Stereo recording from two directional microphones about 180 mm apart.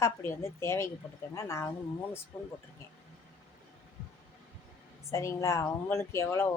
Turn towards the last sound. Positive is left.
turn(degrees=15)  # may be behind; listen again after turning